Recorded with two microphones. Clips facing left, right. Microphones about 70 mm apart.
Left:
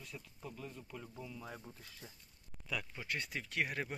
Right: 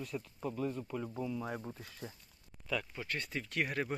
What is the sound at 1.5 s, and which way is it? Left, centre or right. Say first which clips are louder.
Speech: right 8 dB; right.